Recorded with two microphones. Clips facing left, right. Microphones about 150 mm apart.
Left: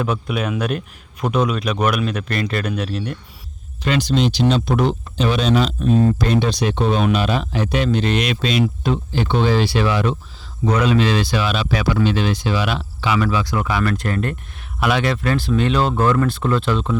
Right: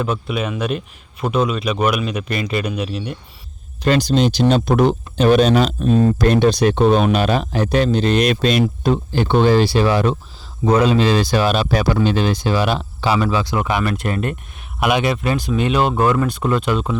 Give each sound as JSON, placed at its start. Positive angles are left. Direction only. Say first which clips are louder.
{"t": 0.0, "sound": "speech", "louder": "even", "side_deg": 0}
{"t": 3.8, "sound": "speech", "louder": "right 3 dB", "side_deg": -40}